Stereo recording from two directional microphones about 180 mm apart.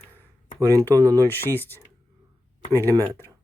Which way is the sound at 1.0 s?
20° right (ahead or behind).